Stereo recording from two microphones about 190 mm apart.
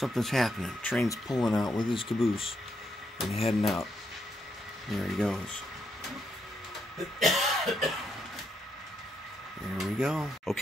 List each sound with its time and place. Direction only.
0.0 s speech: centre (ahead or behind)
1.0 s speech: 15° left (ahead or behind)
3.4 s speech: centre (ahead or behind)
4.9 s speech: centre (ahead or behind)
7.2 s cough: centre (ahead or behind)
9.8 s speech: 5° right (ahead or behind)